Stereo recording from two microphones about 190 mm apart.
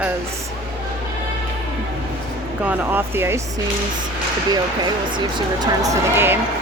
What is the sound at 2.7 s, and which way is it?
Speech, 10° right (ahead or behind).